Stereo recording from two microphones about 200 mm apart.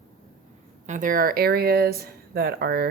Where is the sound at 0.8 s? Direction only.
40° right (ahead or behind).